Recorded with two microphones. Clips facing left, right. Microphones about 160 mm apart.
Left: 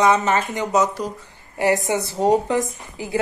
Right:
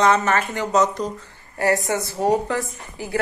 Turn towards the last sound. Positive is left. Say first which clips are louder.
# left 1 dB
turn(degrees=20)  # may be behind; listen again after turning